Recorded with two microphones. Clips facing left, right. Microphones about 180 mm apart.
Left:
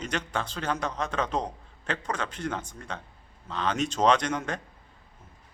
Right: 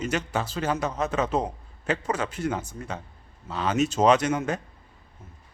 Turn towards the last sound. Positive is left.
turn(degrees=-5)  # may be behind; listen again after turning